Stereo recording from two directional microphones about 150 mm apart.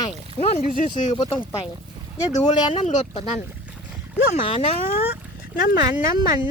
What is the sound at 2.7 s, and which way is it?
Speech, 50° left (ahead or behind).